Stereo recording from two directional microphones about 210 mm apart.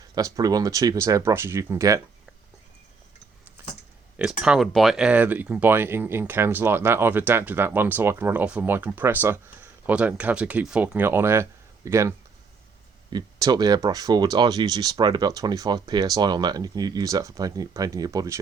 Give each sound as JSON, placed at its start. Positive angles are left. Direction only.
{"t": 0.0, "sound": "speech", "side_deg": -15}
{"t": 3.6, "sound": "a sound", "side_deg": -10}
{"t": 4.2, "sound": "speech", "side_deg": -5}